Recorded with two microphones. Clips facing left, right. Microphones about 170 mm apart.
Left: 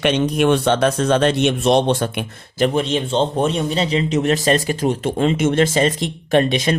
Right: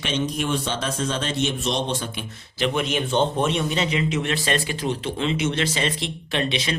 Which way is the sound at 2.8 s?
30° left (ahead or behind).